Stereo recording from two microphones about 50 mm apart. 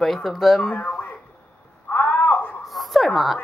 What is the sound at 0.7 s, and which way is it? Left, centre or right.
Speech, left.